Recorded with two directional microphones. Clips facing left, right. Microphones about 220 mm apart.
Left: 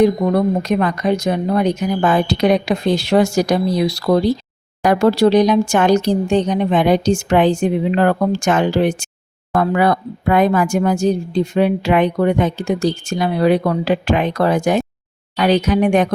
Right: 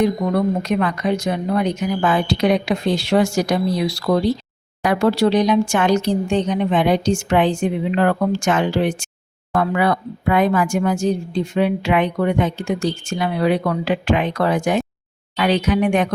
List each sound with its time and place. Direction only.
0.0 s speech: 40° left (ahead or behind)